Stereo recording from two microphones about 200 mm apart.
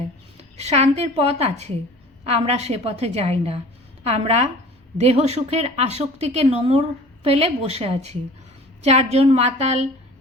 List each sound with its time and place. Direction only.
0.5 s speech: 35° right (ahead or behind)